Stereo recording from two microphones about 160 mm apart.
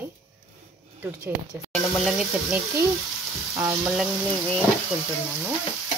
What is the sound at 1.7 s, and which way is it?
Speech, centre (ahead or behind).